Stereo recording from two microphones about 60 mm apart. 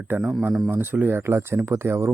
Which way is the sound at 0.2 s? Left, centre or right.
Centre.